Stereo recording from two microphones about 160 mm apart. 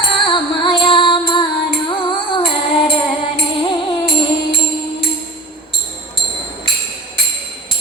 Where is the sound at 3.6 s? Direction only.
35° left (ahead or behind).